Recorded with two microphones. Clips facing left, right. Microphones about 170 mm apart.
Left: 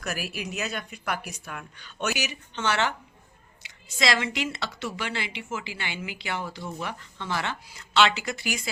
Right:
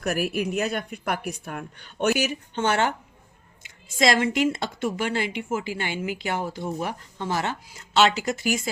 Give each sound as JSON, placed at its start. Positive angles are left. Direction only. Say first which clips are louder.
{"t": 0.0, "sound": "a woman's voice", "louder": "right 8 dB", "side_deg": -55}